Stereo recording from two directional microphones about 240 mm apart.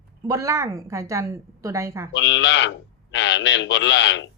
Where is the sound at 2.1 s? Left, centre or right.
Left.